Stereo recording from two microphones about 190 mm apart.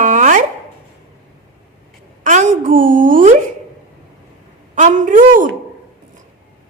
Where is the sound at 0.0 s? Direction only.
40° right (ahead or behind).